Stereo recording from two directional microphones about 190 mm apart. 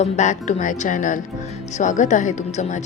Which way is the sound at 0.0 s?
40° left (ahead or behind).